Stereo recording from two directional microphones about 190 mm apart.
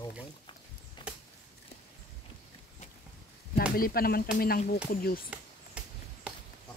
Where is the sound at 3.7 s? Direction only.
50° left (ahead or behind).